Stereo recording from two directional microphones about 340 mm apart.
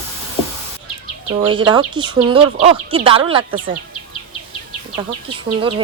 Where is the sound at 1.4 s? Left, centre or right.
Centre.